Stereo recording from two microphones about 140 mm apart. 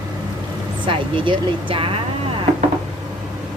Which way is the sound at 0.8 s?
35° right (ahead or behind).